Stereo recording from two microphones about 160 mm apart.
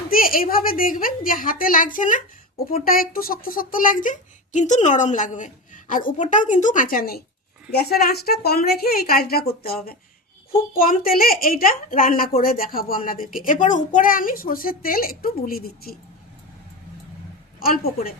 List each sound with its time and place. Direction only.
0.1 s a woman's voice: 65° left (ahead or behind)
7.7 s a woman's voice: 75° left (ahead or behind)
17.6 s a woman's voice: 65° left (ahead or behind)